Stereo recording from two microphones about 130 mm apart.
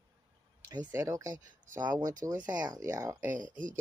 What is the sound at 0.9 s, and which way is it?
Speech, 25° right (ahead or behind).